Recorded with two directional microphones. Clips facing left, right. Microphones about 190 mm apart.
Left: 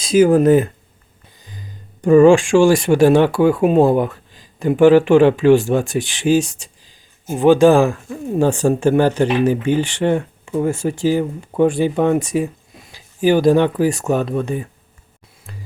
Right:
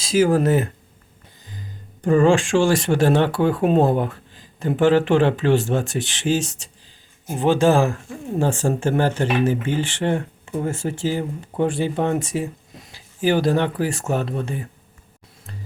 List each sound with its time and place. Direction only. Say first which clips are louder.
0.0 s speech: left 5 dB; 15° left (ahead or behind)